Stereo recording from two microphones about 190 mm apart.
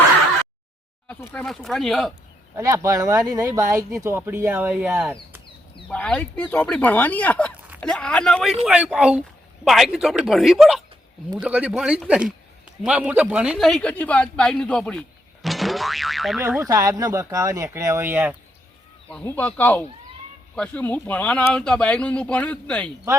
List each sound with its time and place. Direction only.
1.0 s speech: 10° left (ahead or behind)
2.6 s speech: 15° right (ahead or behind)
16.6 s speech: 20° right (ahead or behind)
19.1 s speech: 10° left (ahead or behind)